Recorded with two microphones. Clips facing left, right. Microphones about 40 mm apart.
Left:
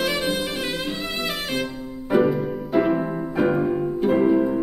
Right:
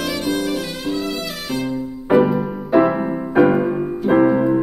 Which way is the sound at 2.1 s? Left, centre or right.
Centre.